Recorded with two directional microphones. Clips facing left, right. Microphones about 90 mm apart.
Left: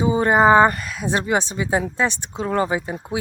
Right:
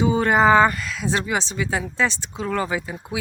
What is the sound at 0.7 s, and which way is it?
Speech, 40° left (ahead or behind).